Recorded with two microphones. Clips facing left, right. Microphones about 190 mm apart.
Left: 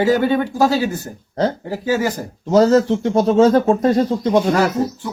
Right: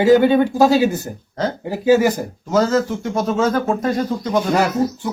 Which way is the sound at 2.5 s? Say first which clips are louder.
Left 4 dB; 35° left (ahead or behind).